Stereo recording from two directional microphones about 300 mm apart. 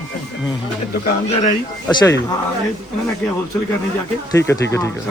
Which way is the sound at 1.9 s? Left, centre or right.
Centre.